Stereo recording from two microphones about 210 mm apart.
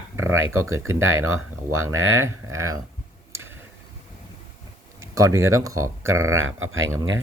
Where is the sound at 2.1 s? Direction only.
15° right (ahead or behind).